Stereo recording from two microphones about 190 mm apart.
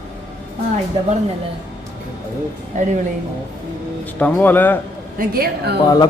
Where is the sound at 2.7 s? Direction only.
40° right (ahead or behind).